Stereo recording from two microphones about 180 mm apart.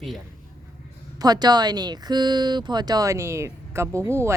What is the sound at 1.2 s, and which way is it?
Speech, 20° right (ahead or behind).